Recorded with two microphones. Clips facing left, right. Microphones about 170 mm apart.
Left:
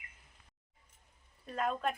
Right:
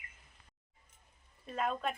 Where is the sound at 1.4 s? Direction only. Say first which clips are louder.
Left 1 dB; centre (ahead or behind).